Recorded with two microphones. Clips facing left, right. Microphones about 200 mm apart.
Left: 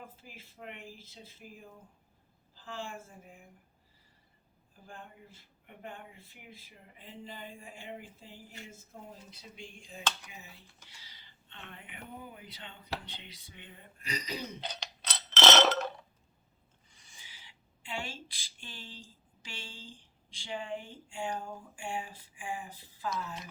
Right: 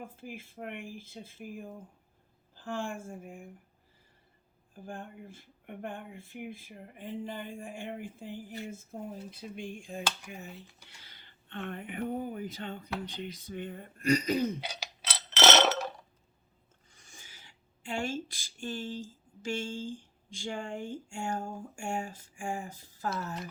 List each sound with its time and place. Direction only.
0.0 s speech: 50° right (ahead or behind)
4.7 s speech: 50° right (ahead or behind)
14.6 s a sound: 10° right (ahead or behind)
16.9 s speech: 45° right (ahead or behind)